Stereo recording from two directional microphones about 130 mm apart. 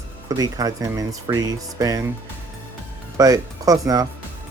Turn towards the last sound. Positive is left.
turn(degrees=-30)  # may be behind; listen again after turning